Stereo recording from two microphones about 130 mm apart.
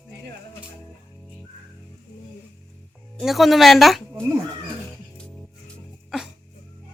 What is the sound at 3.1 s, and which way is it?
Speech, centre (ahead or behind).